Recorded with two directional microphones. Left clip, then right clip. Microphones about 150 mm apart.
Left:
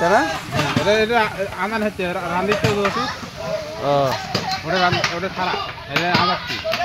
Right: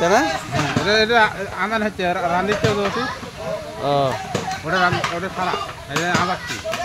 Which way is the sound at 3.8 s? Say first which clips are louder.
Left 1 dB; 10° right (ahead or behind).